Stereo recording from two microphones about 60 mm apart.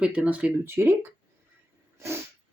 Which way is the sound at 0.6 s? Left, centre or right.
Right.